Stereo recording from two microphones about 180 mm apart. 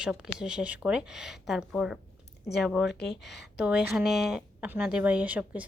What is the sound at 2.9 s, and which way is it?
Speech, 70° left (ahead or behind).